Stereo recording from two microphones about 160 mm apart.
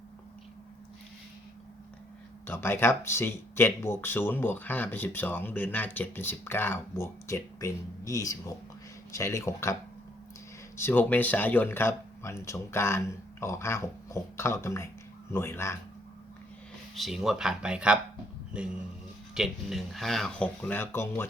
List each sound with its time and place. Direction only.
2.5 s speech: 15° left (ahead or behind)
10.8 s speech: 10° left (ahead or behind)
16.9 s speech: centre (ahead or behind)